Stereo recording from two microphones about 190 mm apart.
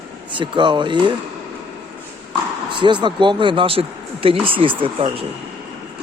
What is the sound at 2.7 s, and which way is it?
Speech, 25° right (ahead or behind).